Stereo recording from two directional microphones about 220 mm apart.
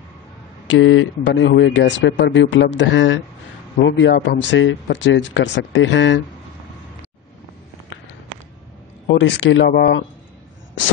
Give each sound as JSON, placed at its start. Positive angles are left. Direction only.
{"t": 0.7, "sound": "speech", "side_deg": 60}
{"t": 9.0, "sound": "speech", "side_deg": 55}